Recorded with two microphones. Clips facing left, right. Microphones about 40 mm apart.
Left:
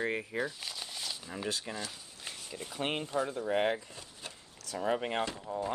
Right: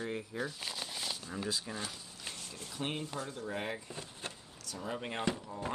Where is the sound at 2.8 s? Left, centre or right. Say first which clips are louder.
Left 4 dB; left.